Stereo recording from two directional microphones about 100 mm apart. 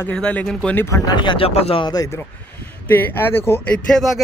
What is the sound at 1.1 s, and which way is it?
Speech, 55° left (ahead or behind).